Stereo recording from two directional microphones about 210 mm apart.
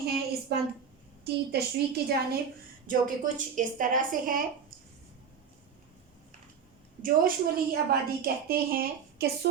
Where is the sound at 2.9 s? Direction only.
40° right (ahead or behind).